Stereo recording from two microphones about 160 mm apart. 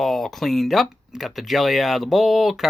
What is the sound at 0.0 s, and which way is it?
Speech, centre (ahead or behind).